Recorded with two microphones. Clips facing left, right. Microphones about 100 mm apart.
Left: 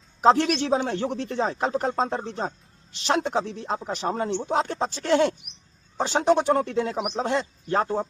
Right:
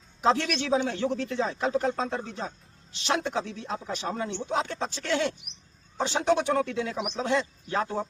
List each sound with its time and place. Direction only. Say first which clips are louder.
0.2 s speech: left 6 dB; 45° left (ahead or behind)